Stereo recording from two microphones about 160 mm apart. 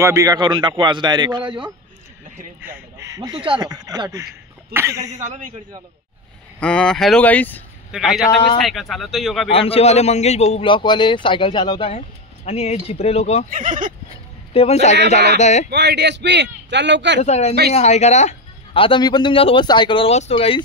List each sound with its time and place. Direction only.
0.0 s a man's voice: 20° right (ahead or behind)
2.6 s a man's voice: 15° right (ahead or behind)
5.2 s a man's voice: 50° right (ahead or behind)
6.6 s speech: 5° left (ahead or behind)
7.9 s speech: centre (ahead or behind)
9.5 s speech: 35° left (ahead or behind)
12.4 s speech: 40° left (ahead or behind)
13.5 s speech: 55° right (ahead or behind)
14.5 s speech: 40° left (ahead or behind)
15.7 s a man's voice: 90° right
17.2 s speech: 45° left (ahead or behind)